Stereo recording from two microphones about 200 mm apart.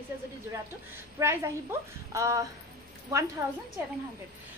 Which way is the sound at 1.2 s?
15° right (ahead or behind).